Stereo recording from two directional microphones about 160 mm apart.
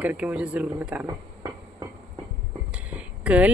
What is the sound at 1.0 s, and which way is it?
Train, 20° right (ahead or behind).